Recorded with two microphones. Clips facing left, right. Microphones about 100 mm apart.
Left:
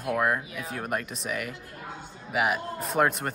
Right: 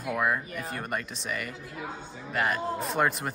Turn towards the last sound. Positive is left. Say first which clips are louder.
# left 2 dB
turn(degrees=0)  # may be behind; listen again after turning